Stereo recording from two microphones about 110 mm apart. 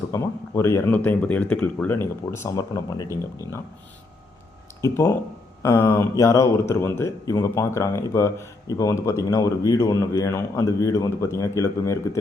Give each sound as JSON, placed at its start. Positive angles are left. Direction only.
{"t": 0.1, "sound": "a man's voice", "side_deg": 25}
{"t": 4.8, "sound": "a man's voice", "side_deg": 25}